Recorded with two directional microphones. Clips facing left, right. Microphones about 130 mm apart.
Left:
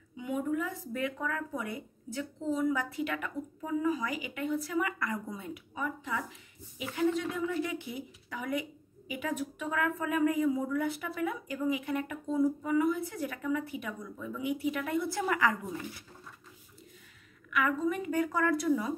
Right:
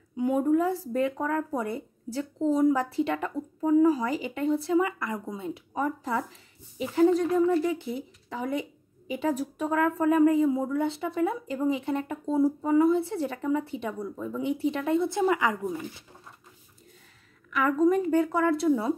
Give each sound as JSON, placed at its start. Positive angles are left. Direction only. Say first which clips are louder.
{"t": 0.2, "sound": "speech", "louder": "right 9 dB", "side_deg": -40}
{"t": 5.8, "sound": "speech", "louder": "right 7 dB", "side_deg": -40}
{"t": 17.5, "sound": "speech", "louder": "right 7 dB", "side_deg": -35}